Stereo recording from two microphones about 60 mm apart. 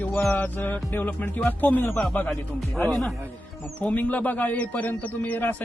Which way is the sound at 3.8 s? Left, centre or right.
Left.